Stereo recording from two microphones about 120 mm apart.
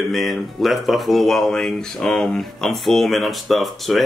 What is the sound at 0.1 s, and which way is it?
Speech, centre (ahead or behind).